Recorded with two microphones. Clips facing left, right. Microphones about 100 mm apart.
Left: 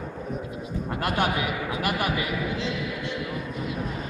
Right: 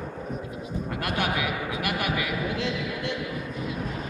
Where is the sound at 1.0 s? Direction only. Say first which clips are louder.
Left 3 dB; 30° left (ahead or behind).